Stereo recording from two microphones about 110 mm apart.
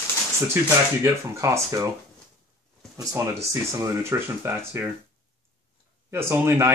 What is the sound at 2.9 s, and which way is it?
Speech, 25° right (ahead or behind).